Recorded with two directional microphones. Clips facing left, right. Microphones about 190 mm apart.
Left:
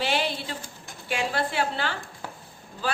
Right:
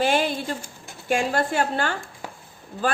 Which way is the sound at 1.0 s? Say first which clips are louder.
Right 5 dB; 45° right (ahead or behind).